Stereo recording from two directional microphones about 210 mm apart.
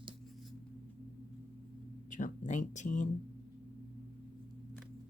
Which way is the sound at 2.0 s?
35° left (ahead or behind).